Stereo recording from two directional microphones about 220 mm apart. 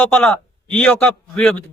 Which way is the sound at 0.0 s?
5° left (ahead or behind).